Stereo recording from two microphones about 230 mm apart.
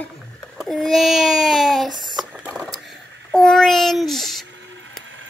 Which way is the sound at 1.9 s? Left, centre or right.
Centre.